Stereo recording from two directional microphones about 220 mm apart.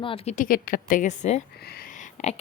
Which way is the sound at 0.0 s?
25° left (ahead or behind).